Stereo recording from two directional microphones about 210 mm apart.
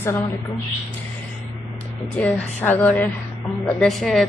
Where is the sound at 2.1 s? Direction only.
10° left (ahead or behind).